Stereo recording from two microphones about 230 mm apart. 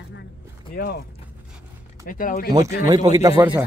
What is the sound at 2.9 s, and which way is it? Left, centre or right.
Speech, centre.